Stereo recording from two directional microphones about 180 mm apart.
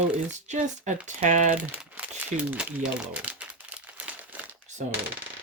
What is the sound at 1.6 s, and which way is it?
Crumpling, 10° right (ahead or behind).